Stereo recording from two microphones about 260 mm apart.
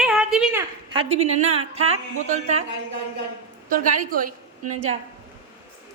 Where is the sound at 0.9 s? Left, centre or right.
Right.